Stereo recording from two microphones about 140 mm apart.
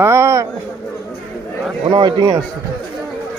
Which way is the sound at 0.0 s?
20° right (ahead or behind).